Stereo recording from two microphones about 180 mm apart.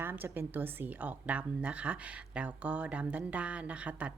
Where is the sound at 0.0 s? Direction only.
10° right (ahead or behind).